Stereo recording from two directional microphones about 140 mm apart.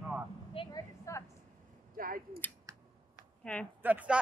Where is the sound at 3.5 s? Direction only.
10° left (ahead or behind).